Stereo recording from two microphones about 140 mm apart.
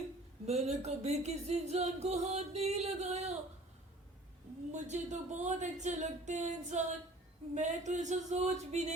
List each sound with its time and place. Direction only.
0.4 s music: 50° right (ahead or behind)
4.7 s speech: 55° right (ahead or behind)